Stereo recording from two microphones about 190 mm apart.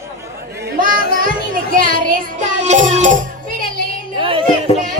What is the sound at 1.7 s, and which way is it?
Speech, 45° right (ahead or behind).